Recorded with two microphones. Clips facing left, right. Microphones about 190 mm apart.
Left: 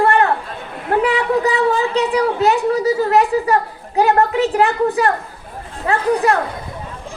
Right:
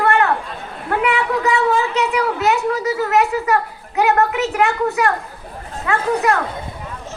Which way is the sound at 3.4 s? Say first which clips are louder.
Left 1 dB; 35° left (ahead or behind).